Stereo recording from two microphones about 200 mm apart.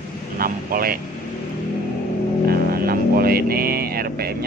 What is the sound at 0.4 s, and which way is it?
Speech, 45° right (ahead or behind).